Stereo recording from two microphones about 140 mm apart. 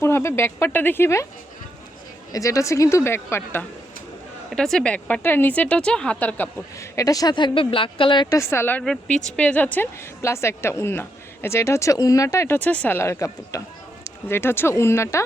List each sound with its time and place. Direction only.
0.0 s speech: 15° left (ahead or behind)
2.3 s speech: 25° left (ahead or behind)
4.5 s speech: 5° left (ahead or behind); by 8.3 s 35° left (ahead or behind)
8.3 s speech: 20° left (ahead or behind)
8.8 s speech: 5° left (ahead or behind)
13.0 s speech: 20° left (ahead or behind)